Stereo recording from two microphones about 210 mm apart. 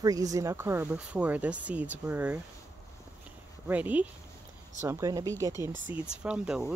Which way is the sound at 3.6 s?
10° right (ahead or behind).